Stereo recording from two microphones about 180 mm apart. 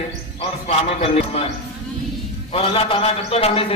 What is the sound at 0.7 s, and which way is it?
Speech, 35° left (ahead or behind).